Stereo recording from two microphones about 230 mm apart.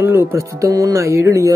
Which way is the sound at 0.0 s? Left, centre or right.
Centre.